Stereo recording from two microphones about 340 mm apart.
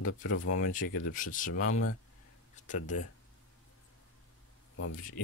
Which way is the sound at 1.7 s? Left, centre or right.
Left.